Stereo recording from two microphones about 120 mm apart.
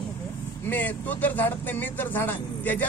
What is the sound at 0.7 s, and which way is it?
A man's voice, 15° left (ahead or behind).